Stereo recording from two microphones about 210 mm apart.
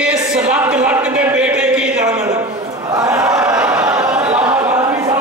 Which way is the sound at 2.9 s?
15° right (ahead or behind).